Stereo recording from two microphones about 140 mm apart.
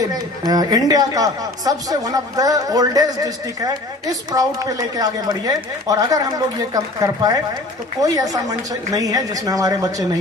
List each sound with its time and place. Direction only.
0.0 s speech: 25° right (ahead or behind)